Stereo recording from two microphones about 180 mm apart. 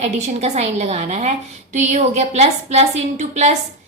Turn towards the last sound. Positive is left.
turn(degrees=-40)  # may be behind; listen again after turning